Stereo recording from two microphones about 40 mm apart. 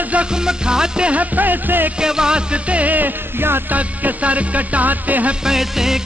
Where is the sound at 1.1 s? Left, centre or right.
Right.